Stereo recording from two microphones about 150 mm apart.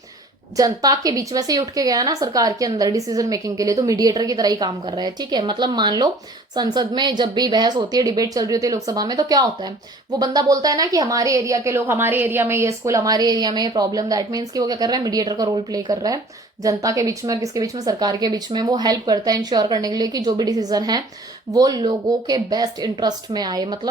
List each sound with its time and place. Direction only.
0.5 s a woman's voice: 25° right (ahead or behind)